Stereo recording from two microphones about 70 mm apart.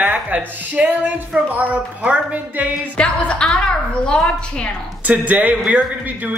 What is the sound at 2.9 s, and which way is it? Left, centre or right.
A woman's voice, centre.